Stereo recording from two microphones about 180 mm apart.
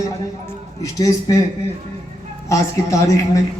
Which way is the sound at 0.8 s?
20° left (ahead or behind).